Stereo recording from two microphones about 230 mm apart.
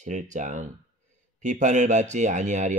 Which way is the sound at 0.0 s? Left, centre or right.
Right.